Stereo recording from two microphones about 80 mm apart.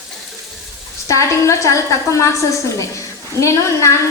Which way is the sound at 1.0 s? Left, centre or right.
Left.